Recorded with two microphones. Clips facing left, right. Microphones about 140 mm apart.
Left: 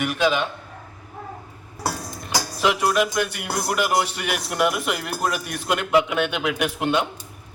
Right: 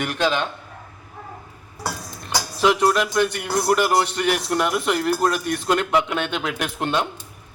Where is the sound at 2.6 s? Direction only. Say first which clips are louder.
Right 2 dB; 5° left (ahead or behind).